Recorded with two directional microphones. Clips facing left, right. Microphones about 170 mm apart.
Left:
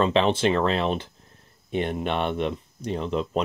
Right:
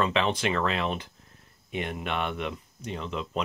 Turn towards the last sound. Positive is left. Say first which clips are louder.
# left 7 dB
turn(degrees=40)  # may be behind; listen again after turning